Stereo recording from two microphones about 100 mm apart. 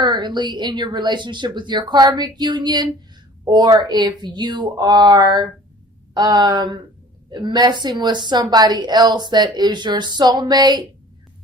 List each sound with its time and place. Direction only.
0.0 s a woman's voice: 45° right (ahead or behind)